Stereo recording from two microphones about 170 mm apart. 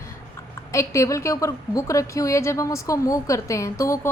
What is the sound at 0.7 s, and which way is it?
Speech, 15° left (ahead or behind).